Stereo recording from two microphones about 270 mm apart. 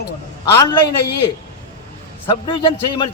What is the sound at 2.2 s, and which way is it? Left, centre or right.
Speech, centre.